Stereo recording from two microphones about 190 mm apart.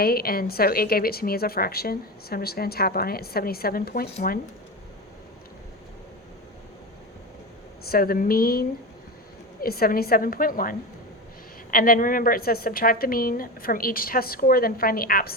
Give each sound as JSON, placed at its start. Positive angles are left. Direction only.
{"t": 0.0, "sound": "a woman's voice", "side_deg": 50}
{"t": 7.9, "sound": "a woman's voice", "side_deg": 50}